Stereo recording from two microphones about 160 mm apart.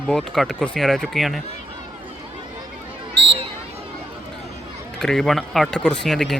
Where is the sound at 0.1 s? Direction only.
Centre (ahead or behind).